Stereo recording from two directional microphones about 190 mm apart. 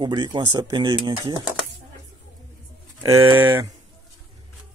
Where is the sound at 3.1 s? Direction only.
10° right (ahead or behind).